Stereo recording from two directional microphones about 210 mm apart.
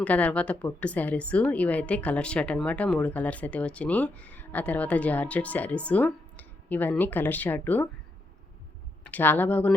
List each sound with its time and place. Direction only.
0.0 s a woman's voice: 5° left (ahead or behind)
9.0 s a woman's voice: 10° left (ahead or behind)